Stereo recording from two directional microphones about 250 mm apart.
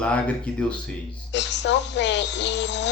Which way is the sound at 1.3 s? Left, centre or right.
Left.